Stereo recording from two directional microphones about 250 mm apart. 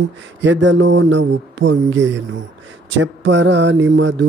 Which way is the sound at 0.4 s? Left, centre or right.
Right.